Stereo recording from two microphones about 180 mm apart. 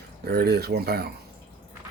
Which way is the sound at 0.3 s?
65° right (ahead or behind).